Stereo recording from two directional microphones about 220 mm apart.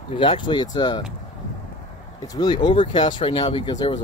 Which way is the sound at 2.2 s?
20° left (ahead or behind).